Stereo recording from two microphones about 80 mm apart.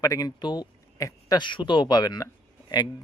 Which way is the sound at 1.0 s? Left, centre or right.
Left.